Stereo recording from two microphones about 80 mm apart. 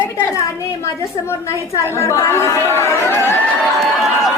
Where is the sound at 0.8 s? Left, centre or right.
Left.